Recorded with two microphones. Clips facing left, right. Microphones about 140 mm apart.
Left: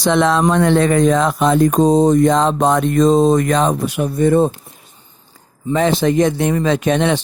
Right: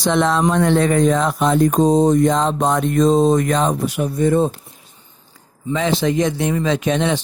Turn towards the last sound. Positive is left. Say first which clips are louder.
# left 3 dB
turn(degrees=60)  # may be behind; listen again after turning